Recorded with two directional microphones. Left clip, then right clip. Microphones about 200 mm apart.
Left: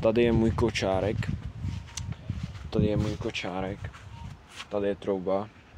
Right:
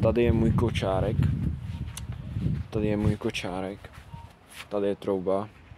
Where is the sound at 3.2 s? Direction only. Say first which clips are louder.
Right 1 dB; 40° right (ahead or behind).